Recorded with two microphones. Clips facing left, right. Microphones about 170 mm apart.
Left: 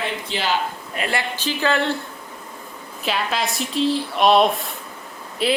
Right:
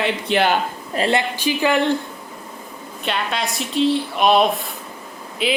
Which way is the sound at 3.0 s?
Centre (ahead or behind).